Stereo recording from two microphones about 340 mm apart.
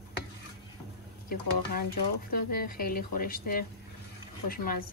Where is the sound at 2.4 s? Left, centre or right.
Left.